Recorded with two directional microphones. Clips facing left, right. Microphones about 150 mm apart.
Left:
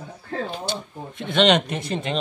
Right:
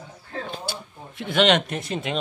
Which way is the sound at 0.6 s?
5° right (ahead or behind).